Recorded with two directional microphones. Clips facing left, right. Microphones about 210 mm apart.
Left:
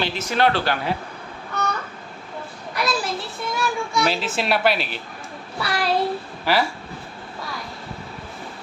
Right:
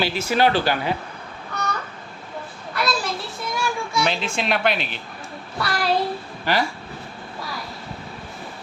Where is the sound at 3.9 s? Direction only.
5° left (ahead or behind).